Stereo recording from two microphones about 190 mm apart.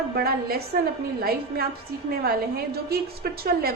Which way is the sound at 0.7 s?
45° right (ahead or behind).